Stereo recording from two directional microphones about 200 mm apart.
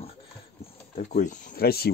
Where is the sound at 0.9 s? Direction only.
35° left (ahead or behind).